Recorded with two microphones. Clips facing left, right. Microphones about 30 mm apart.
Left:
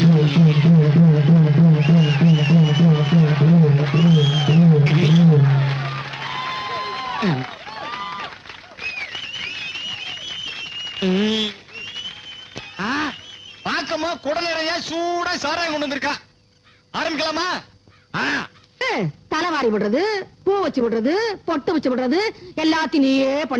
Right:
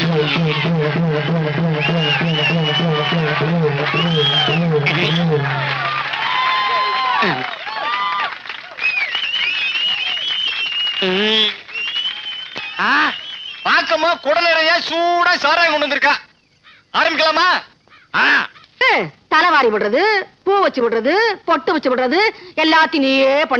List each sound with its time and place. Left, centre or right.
0.0 s radio: right
13.7 s a sound: right
16.9 s speech: right